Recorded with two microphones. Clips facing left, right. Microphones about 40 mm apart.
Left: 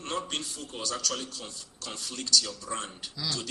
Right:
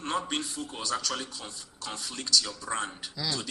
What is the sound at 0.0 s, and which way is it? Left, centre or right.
Speech, right.